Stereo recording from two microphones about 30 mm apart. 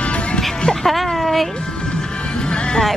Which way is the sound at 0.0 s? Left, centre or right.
Left.